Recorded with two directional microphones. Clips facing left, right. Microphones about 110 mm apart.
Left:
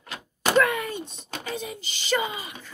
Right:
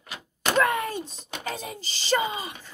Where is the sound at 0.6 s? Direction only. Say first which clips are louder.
Left 1 dB; 35° right (ahead or behind).